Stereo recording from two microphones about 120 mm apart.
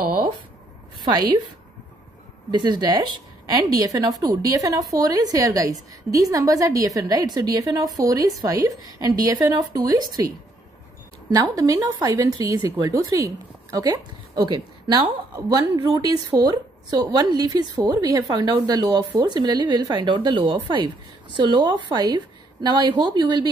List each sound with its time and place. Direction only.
2.5 s a woman's voice: 40° right (ahead or behind)
11.3 s a woman's voice: 30° right (ahead or behind)